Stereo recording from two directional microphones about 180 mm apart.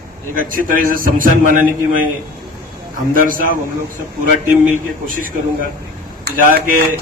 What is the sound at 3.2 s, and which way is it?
Speech, 50° right (ahead or behind).